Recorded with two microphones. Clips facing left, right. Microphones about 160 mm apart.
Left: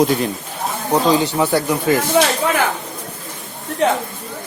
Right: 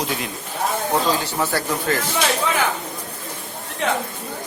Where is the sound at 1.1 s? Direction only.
15° left (ahead or behind).